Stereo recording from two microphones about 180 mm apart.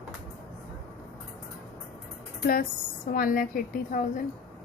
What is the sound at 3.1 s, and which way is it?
Speech, 50° left (ahead or behind).